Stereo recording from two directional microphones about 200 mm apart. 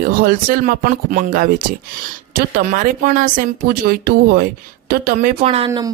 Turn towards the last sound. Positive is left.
turn(degrees=-20)  # may be behind; listen again after turning